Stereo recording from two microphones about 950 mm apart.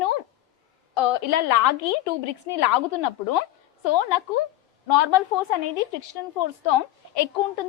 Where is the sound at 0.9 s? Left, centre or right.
Left.